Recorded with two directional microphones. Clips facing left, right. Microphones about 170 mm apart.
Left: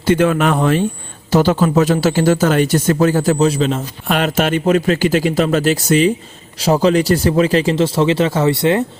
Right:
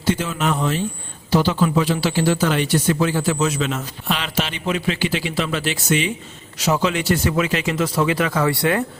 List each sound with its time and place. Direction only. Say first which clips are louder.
0.0 s speech: left 8 dB; 60° left (ahead or behind)
1.3 s speech: left 5 dB; 45° left (ahead or behind); by 3.8 s 30° left (ahead or behind)
4.0 s speech: left 9 dB; 50° left (ahead or behind); by 8.8 s 25° left (ahead or behind)